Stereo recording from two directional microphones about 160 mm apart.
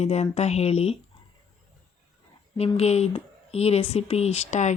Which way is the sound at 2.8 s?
40° left (ahead or behind).